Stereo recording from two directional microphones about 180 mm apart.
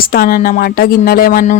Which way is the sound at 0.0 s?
55° left (ahead or behind).